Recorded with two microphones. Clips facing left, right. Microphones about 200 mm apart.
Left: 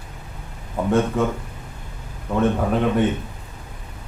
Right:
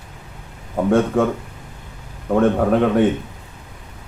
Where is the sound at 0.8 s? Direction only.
50° right (ahead or behind).